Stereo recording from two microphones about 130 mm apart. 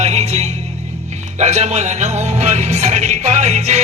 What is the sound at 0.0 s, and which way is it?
Music, 55° right (ahead or behind).